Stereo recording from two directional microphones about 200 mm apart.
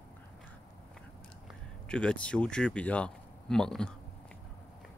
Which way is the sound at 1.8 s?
5° left (ahead or behind).